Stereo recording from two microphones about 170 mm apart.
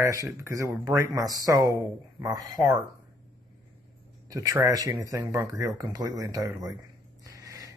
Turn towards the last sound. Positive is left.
turn(degrees=-20)  # may be behind; listen again after turning